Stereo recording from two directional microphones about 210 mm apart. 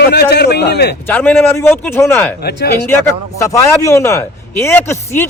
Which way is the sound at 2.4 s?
50° left (ahead or behind).